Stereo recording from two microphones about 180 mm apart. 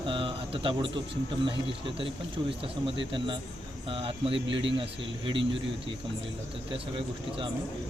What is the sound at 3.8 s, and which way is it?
Speech, 30° right (ahead or behind).